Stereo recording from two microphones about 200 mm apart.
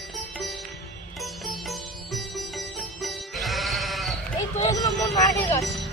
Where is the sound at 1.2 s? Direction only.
Centre (ahead or behind).